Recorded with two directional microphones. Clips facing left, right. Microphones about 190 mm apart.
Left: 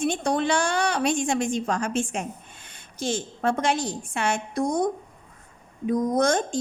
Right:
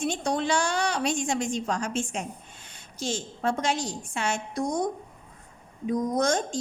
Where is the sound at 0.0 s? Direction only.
55° left (ahead or behind).